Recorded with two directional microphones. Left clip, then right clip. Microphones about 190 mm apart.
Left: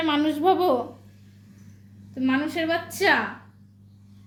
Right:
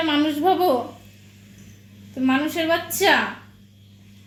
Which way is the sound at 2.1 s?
15° right (ahead or behind).